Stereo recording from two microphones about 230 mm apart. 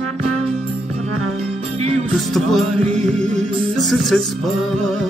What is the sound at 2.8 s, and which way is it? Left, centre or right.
Music, right.